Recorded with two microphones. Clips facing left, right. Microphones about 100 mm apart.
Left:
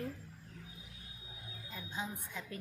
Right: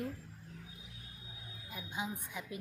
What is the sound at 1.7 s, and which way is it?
Speech, 15° right (ahead or behind).